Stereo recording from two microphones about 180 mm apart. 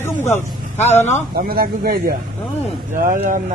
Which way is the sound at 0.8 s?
40° left (ahead or behind).